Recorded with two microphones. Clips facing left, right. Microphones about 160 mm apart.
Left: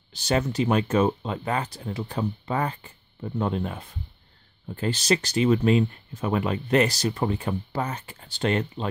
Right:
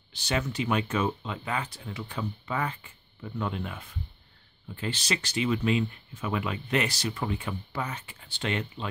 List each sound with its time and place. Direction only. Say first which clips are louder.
0.1 s speech: left 6 dB; 40° left (ahead or behind)